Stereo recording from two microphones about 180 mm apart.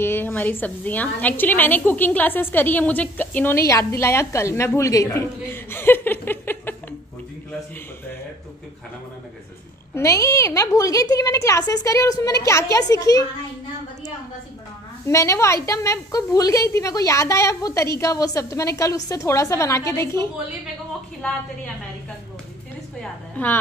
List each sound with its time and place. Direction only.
0.0 s a woman's voice: 10° left (ahead or behind)
9.9 s a woman's voice: 15° left (ahead or behind)
15.0 s a woman's voice: 15° left (ahead or behind)
21.2 s a woman's voice: 5° left (ahead or behind)
22.9 s a woman's voice: 10° left (ahead or behind)